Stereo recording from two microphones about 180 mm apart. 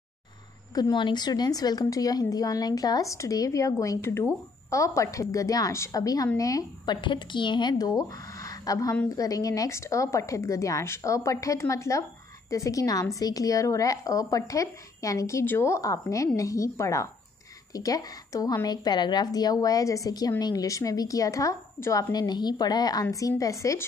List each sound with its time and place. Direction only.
0.7 s a woman's voice: 25° left (ahead or behind)